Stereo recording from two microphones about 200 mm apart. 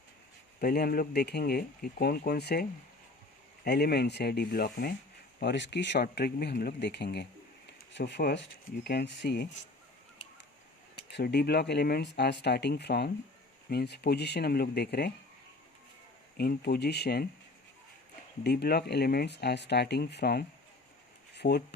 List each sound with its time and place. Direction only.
0.6 s speech: 50° left (ahead or behind)
5.4 s speech: 60° left (ahead or behind)
11.1 s speech: 55° left (ahead or behind)
16.4 s speech: 50° left (ahead or behind)
18.4 s speech: 55° left (ahead or behind)
21.3 s a sound: 55° left (ahead or behind)